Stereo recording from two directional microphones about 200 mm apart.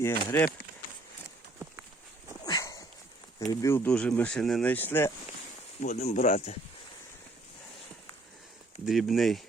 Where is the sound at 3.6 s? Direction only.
10° left (ahead or behind).